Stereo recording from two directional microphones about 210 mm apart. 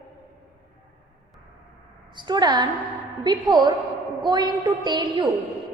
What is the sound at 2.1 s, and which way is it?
A woman's voice, 20° right (ahead or behind).